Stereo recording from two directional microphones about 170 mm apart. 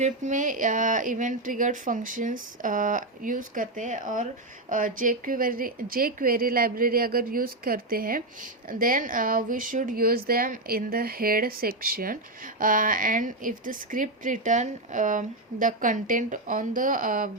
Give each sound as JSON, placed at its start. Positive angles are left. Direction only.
{"t": 0.0, "sound": "a woman's voice", "side_deg": -45}